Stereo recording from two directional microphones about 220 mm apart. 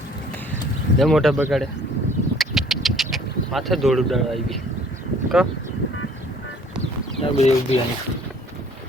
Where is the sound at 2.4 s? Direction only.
Centre (ahead or behind).